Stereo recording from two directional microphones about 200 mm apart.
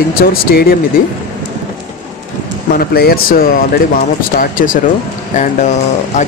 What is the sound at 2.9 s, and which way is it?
Speech, 50° left (ahead or behind).